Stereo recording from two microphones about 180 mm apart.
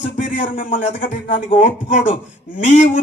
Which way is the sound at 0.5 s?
45° left (ahead or behind).